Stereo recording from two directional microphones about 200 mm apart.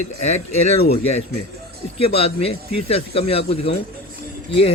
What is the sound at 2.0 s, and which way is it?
Speech, 30° left (ahead or behind).